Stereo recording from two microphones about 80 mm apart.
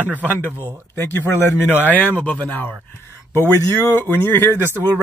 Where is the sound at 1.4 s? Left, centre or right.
Left.